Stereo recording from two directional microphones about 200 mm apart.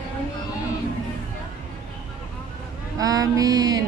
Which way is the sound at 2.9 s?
20° right (ahead or behind).